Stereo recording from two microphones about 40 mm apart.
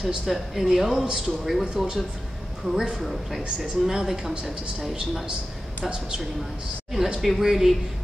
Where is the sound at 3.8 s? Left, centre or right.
Centre.